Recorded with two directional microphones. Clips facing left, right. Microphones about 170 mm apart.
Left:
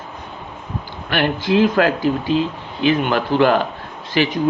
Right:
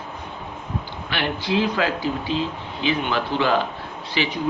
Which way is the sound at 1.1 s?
50° left (ahead or behind).